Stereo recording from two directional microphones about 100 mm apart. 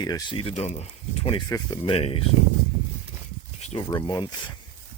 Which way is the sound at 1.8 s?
70° left (ahead or behind).